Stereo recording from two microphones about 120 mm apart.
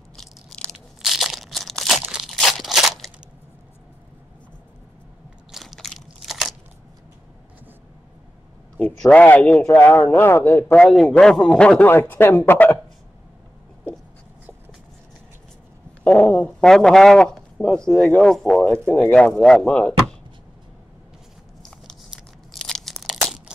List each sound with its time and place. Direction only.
0.1 s crunch: 5° left (ahead or behind)
5.5 s biting: centre (ahead or behind)
8.7 s a man's voice: 10° left (ahead or behind)
16.0 s a man's voice: 10° left (ahead or behind)
22.1 s crunch: centre (ahead or behind)